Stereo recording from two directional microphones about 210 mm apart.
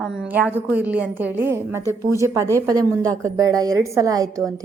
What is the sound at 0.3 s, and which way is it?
A woman's voice, 5° right (ahead or behind).